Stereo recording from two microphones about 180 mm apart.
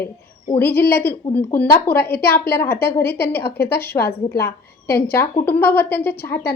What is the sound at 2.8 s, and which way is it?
A woman's voice, 60° left (ahead or behind).